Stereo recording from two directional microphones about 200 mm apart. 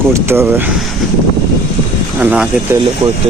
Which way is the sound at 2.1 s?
5° right (ahead or behind).